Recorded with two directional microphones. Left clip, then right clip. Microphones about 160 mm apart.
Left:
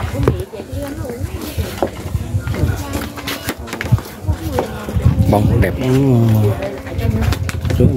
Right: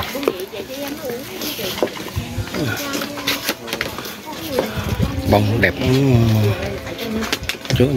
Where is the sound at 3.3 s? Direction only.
45° left (ahead or behind).